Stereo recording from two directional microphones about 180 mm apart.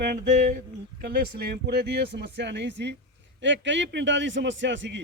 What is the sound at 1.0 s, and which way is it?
Speech, 60° right (ahead or behind).